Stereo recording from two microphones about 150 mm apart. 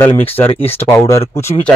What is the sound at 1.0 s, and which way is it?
Speech, 15° left (ahead or behind).